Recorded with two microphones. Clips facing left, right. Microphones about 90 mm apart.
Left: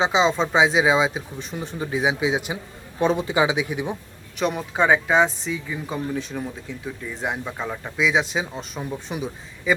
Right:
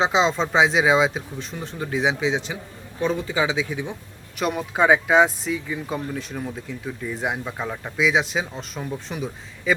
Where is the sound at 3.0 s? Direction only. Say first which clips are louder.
Left 3 dB; 20° left (ahead or behind).